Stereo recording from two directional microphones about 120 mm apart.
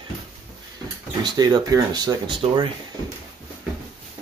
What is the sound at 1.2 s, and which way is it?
Speech, 35° right (ahead or behind).